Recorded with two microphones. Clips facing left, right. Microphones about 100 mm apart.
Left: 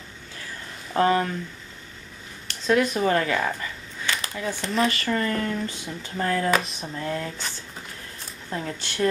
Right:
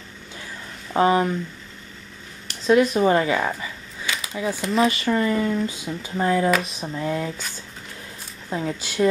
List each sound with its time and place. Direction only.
0.9 s speech: 15° right (ahead or behind)
2.6 s speech: centre (ahead or behind)
3.1 s speech: 15° right (ahead or behind)
5.1 s speech: 10° right (ahead or behind)
8.5 s speech: 10° right (ahead or behind)